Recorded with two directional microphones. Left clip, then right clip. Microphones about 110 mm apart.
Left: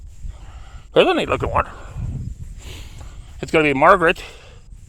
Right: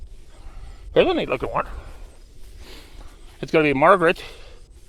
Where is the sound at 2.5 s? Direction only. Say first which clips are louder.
Left 3 dB; 65° left (ahead or behind); by 4.6 s 30° left (ahead or behind).